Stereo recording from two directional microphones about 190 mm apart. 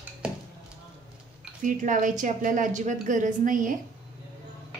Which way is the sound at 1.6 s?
40° right (ahead or behind).